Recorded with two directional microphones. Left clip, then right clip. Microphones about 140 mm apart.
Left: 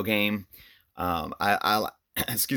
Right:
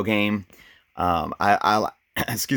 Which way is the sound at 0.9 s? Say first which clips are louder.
Right 6 dB; 45° right (ahead or behind).